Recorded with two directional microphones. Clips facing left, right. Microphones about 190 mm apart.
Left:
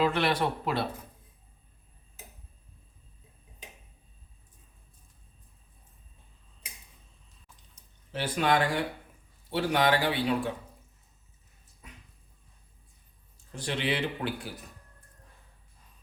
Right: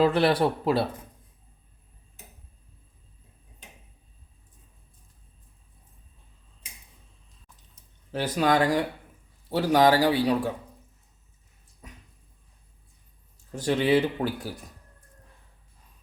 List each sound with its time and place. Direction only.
0.0 s a man's voice: 35° right (ahead or behind)
8.1 s a man's voice: 40° right (ahead or behind)
13.5 s speech: 45° right (ahead or behind)